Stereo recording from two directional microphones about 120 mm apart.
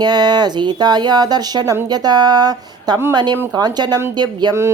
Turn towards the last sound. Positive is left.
turn(degrees=-35)  # may be behind; listen again after turning